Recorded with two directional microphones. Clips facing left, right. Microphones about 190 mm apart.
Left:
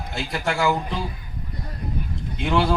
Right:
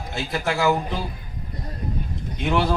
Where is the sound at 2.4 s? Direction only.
Centre (ahead or behind).